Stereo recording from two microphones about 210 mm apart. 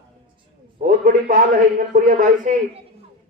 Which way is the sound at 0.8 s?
40° right (ahead or behind).